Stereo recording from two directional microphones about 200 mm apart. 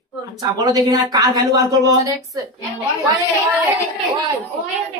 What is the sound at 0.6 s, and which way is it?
Speech, 15° right (ahead or behind).